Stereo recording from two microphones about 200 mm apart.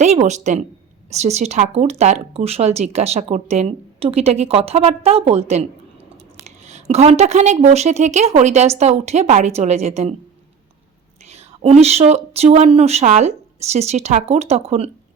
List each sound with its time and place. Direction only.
0.0 s a woman's voice: 35° right (ahead or behind)
11.3 s speech: 30° right (ahead or behind)